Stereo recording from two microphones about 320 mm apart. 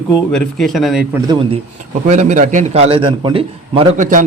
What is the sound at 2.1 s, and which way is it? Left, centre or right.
Speech, right.